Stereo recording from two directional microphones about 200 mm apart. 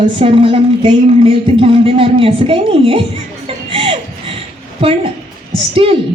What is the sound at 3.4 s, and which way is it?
Music, 30° right (ahead or behind).